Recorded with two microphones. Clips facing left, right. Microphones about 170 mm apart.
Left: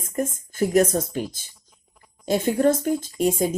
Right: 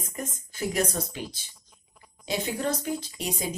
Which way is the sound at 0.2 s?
50° left (ahead or behind).